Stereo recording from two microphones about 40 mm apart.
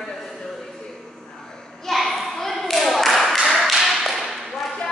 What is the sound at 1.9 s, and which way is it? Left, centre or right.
Children playing, centre.